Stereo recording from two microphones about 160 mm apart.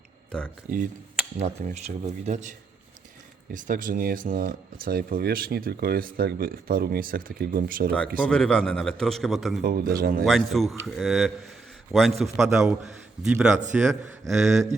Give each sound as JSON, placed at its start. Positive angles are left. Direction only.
{"t": 0.3, "sound": "speech", "side_deg": 5}
{"t": 1.4, "sound": "speech", "side_deg": -45}
{"t": 3.5, "sound": "speech", "side_deg": -55}
{"t": 7.9, "sound": "a man's voice", "side_deg": 5}
{"t": 9.6, "sound": "speech", "side_deg": -65}
{"t": 10.2, "sound": "a man's voice", "side_deg": 0}